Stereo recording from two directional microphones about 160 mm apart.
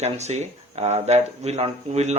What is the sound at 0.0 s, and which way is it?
Speech, 45° right (ahead or behind).